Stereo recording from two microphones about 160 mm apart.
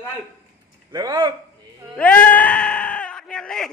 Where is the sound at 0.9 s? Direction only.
25° right (ahead or behind).